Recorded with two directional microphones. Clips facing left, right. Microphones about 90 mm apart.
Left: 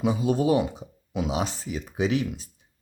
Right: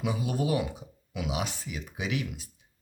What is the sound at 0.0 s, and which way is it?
Speech, 30° left (ahead or behind).